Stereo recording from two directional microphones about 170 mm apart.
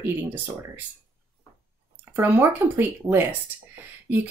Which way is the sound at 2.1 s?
15° right (ahead or behind).